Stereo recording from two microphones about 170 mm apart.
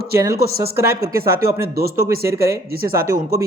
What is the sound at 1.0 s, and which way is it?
Speech, 60° right (ahead or behind).